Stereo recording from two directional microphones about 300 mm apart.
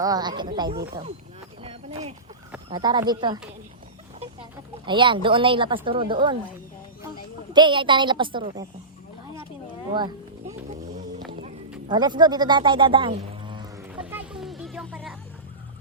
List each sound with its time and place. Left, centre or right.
0.0 s speech: centre
1.6 s a sound: right
2.6 s speech: centre
4.9 s speech: centre
7.5 s speech: centre
9.9 s a sound: centre
11.9 s speech: centre
14.0 s music: centre